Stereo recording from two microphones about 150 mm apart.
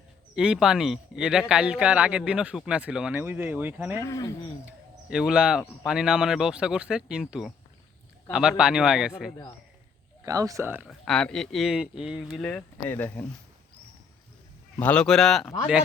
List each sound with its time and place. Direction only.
0.3 s speech: 5° right (ahead or behind)
3.9 s speech: 20° left (ahead or behind)
4.6 s speech: 5° right (ahead or behind)
10.2 s speech: 20° right (ahead or behind)
10.8 s speech: 5° left (ahead or behind)
12.4 s speech: 10° left (ahead or behind)
14.8 s speech: 10° left (ahead or behind)